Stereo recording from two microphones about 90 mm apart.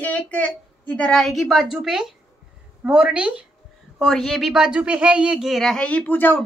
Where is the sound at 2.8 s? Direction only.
10° right (ahead or behind).